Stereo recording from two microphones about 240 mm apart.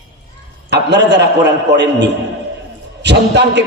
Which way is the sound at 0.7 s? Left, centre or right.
Right.